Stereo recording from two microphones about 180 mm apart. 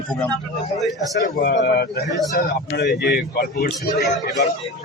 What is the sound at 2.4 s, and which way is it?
Speech, 60° left (ahead or behind).